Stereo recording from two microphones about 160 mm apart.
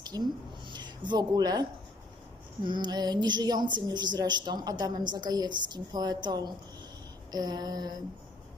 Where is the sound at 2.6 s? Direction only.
30° right (ahead or behind).